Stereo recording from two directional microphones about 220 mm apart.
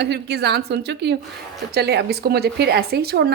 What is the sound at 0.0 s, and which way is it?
Speech, 50° right (ahead or behind).